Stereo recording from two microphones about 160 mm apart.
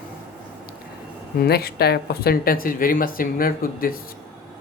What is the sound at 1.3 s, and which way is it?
Speech, 75° left (ahead or behind).